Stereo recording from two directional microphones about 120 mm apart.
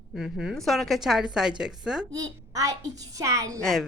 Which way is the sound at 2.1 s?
30° right (ahead or behind).